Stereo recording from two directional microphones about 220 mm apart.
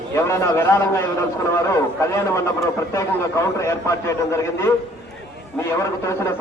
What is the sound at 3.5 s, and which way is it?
A man's voice, 15° left (ahead or behind).